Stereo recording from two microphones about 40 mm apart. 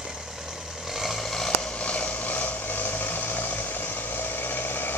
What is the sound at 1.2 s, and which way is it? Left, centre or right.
Vehicle, centre.